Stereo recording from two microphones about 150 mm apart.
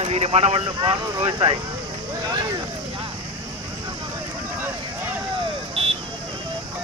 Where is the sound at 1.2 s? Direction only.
25° right (ahead or behind).